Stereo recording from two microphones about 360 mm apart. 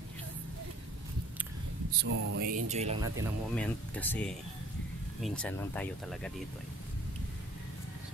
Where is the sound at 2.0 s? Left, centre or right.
Right.